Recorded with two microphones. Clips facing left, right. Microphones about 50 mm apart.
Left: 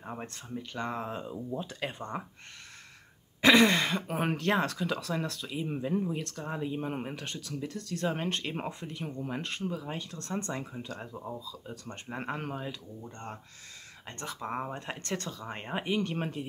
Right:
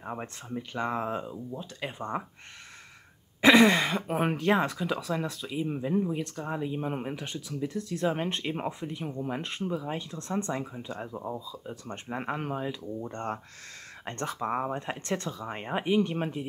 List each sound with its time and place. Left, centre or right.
0.0 s speech: centre
1.2 s speech: centre
1.9 s speech: centre
3.3 s speech: centre
10.5 s speech: centre
13.0 s speech: right
14.0 s speech: right
14.4 s speech: centre